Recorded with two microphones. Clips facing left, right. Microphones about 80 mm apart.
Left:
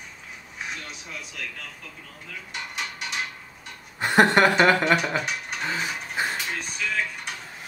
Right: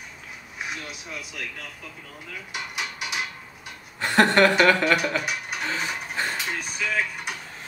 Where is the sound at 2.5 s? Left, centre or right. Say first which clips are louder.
Right 1 dB; centre.